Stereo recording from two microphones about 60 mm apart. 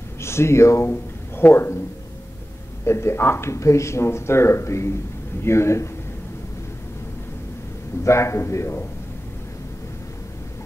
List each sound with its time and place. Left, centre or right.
0.2 s speech: left
2.8 s speech: left
8.0 s speech: left